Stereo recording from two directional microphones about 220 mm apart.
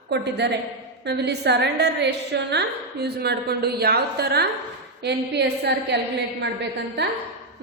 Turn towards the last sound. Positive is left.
turn(degrees=-50)  # may be behind; listen again after turning